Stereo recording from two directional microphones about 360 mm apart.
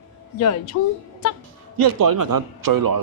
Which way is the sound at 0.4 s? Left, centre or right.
Left.